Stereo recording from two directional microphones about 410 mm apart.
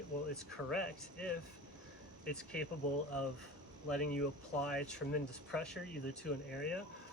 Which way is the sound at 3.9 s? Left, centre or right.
Centre.